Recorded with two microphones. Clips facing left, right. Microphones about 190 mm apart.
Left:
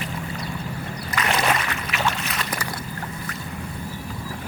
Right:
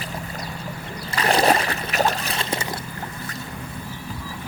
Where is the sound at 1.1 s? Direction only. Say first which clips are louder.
Right 5 dB; 35° right (ahead or behind).